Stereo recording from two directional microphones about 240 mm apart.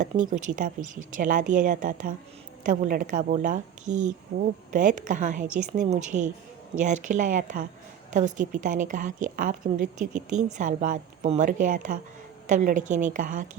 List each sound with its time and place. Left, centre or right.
0.0 s a woman's voice: right